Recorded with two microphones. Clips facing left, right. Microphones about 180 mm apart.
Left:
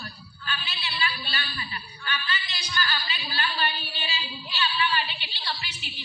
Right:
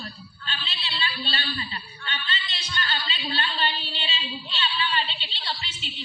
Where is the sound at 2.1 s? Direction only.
25° right (ahead or behind).